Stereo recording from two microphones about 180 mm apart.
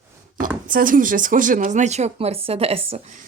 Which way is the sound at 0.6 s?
50° right (ahead or behind).